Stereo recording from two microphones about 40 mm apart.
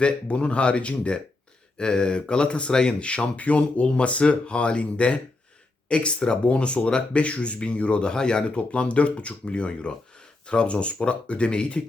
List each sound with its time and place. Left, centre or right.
0.0 s speech: left